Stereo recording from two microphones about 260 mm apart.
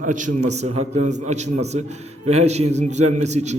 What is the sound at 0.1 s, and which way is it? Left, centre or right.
A man's voice, right.